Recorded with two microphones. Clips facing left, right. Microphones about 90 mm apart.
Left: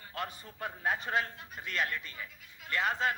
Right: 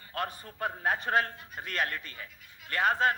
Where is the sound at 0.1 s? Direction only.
45° right (ahead or behind).